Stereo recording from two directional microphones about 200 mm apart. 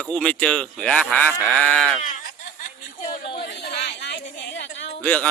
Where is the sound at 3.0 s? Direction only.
40° left (ahead or behind).